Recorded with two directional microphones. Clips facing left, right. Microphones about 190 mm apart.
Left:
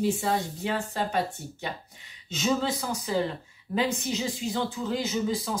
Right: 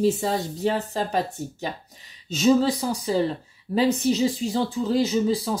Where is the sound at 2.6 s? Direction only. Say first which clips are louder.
Right 6 dB; 35° right (ahead or behind).